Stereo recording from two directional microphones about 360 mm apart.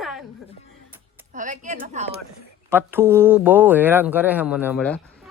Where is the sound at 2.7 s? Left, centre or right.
Centre.